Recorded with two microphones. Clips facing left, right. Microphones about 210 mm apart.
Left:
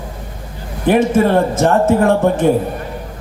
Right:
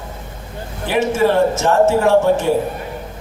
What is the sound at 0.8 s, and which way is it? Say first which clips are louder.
A man's voice: left 4 dB; 55° left (ahead or behind).